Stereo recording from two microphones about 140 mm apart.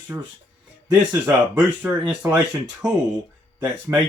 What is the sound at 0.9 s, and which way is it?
Speech, 10° right (ahead or behind).